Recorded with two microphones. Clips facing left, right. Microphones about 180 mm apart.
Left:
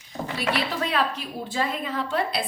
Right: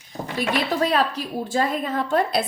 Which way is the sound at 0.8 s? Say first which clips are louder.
Right 5 dB; 40° right (ahead or behind).